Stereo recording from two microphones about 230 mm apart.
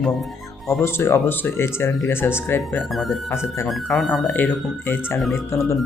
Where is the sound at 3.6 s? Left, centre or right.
Centre.